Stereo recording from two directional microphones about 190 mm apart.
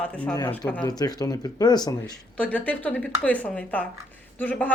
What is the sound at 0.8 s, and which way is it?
Speech, 20° left (ahead or behind).